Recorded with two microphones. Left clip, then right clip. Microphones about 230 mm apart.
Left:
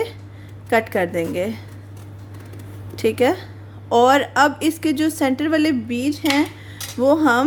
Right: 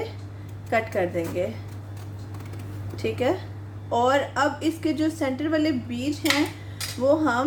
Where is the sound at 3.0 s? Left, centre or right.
Left.